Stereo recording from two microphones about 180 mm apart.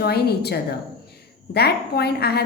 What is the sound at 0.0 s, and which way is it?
A woman's voice, 60° left (ahead or behind).